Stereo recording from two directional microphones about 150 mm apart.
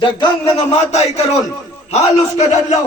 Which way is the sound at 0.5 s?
45° left (ahead or behind).